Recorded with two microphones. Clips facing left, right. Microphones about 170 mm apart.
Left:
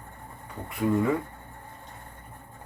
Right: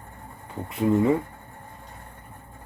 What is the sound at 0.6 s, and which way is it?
Speech, 25° right (ahead or behind).